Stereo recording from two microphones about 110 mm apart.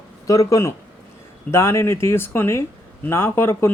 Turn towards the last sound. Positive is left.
turn(degrees=20)  # may be behind; listen again after turning